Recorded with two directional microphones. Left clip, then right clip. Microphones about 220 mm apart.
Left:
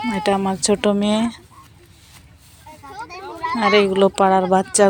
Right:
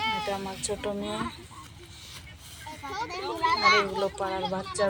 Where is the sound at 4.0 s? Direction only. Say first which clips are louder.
Left 14 dB; 40° left (ahead or behind).